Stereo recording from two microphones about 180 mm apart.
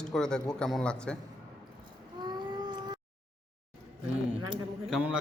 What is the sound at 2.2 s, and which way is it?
Cat, 25° right (ahead or behind).